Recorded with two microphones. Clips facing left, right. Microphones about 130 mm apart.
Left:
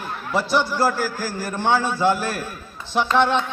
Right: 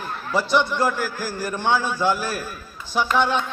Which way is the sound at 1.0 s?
35° left (ahead or behind).